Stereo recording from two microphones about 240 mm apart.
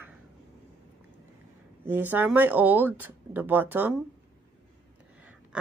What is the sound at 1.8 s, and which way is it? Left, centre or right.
Speech, centre.